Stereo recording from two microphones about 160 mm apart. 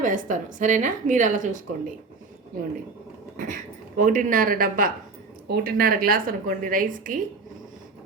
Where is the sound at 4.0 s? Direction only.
50° right (ahead or behind).